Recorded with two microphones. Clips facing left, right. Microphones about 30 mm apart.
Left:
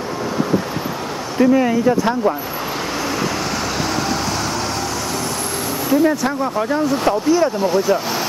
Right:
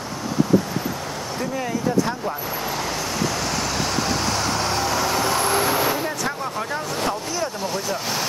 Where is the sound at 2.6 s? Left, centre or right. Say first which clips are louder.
Left 4 dB; centre.